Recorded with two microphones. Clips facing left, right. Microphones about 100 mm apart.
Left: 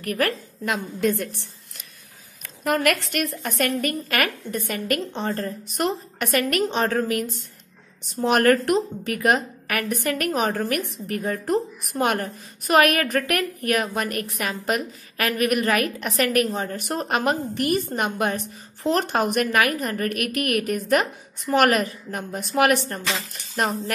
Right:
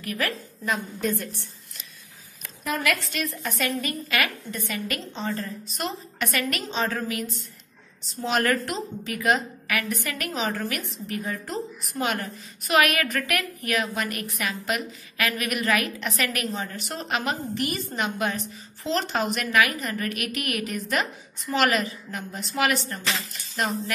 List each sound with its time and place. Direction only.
0.0 s a woman's voice: 55° left (ahead or behind)
0.7 s a woman's voice: 80° left
2.6 s a woman's voice: 60° left (ahead or behind)